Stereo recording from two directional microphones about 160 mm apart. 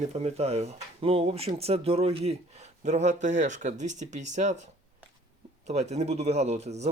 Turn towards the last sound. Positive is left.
turn(degrees=-45)  # may be behind; listen again after turning